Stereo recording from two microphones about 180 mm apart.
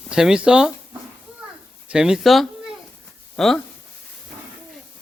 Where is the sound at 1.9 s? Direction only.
5° right (ahead or behind).